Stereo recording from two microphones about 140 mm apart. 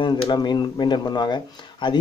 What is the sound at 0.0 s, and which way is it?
A man's voice, 35° left (ahead or behind).